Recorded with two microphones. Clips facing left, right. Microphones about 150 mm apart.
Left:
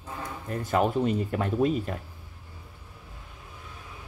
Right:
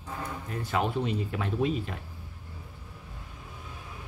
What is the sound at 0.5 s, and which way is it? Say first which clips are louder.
Speech: left 5 dB; 45° left (ahead or behind).